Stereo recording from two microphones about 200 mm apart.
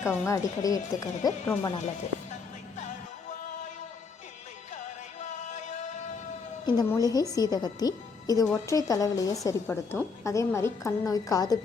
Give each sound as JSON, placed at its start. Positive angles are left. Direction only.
{"t": 0.0, "sound": "a woman's voice", "side_deg": 15}
{"t": 5.2, "sound": "music", "side_deg": 35}
{"t": 6.7, "sound": "a woman's voice", "side_deg": 20}